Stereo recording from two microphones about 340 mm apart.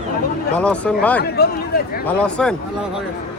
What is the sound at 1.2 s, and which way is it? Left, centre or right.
Speech, left.